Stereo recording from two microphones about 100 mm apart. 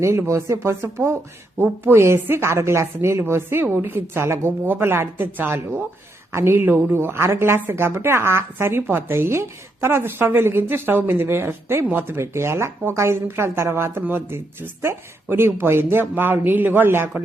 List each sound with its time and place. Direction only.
0.0 s a woman's voice: 30° right (ahead or behind)